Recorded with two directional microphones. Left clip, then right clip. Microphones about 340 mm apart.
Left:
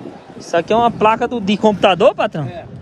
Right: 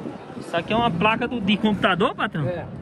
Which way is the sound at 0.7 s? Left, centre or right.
Centre.